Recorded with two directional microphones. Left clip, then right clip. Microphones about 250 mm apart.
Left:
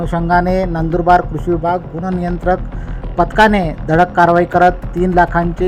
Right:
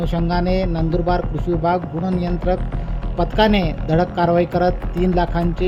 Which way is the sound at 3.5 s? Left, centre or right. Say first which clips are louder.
Left 4 dB; left.